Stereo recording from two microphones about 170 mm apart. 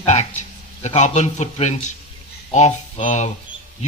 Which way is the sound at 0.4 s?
45° left (ahead or behind).